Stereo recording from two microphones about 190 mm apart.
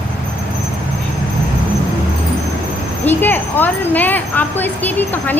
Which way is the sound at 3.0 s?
10° left (ahead or behind).